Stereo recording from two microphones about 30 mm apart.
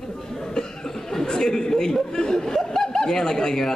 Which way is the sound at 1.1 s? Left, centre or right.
Centre.